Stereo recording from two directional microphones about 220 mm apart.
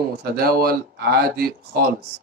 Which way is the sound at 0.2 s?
45° right (ahead or behind).